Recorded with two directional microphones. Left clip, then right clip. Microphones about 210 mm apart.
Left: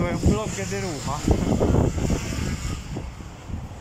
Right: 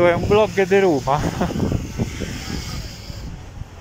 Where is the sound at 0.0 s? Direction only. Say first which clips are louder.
Right 11 dB; 50° right (ahead or behind).